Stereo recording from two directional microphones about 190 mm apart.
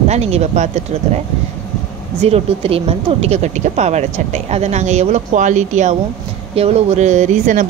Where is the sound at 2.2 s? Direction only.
30° right (ahead or behind).